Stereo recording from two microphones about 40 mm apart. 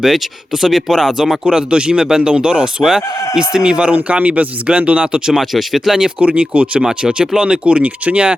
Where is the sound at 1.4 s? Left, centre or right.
Right.